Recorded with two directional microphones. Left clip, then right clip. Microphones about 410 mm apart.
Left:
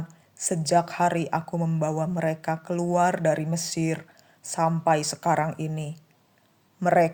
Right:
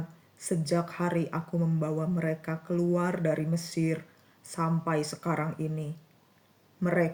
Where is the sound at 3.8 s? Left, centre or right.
Left.